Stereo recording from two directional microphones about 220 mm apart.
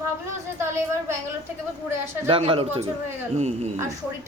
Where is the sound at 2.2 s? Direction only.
25° right (ahead or behind).